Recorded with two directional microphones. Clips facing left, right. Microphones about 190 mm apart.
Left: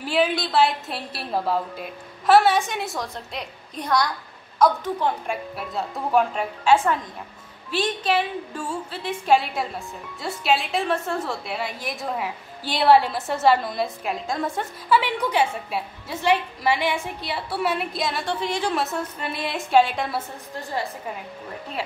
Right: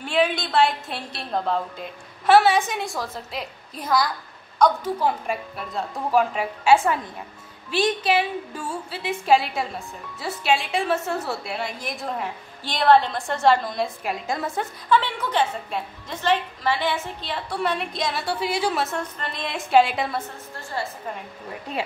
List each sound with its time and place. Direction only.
0.0 s a woman's voice: 5° left (ahead or behind)
14.9 s a woman's voice: 10° left (ahead or behind)
20.8 s a woman's voice: 15° left (ahead or behind)